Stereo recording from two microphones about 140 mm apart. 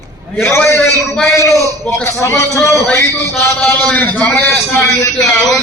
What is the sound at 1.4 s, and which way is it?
A man's voice, 20° left (ahead or behind).